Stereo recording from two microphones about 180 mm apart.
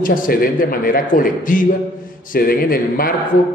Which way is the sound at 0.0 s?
50° left (ahead or behind).